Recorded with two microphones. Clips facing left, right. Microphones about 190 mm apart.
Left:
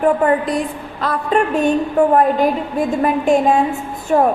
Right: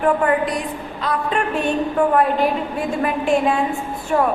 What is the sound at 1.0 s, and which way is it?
Speech, 45° left (ahead or behind).